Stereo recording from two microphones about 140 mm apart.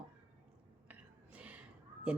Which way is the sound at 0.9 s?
10° right (ahead or behind).